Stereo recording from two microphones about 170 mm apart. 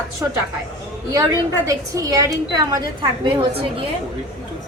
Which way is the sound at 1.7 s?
20° right (ahead or behind).